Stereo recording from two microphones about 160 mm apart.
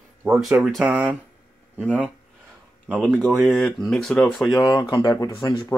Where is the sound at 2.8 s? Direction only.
10° right (ahead or behind).